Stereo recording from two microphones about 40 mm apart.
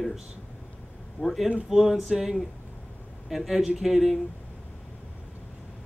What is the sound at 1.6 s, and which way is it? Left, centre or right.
Male singing, centre.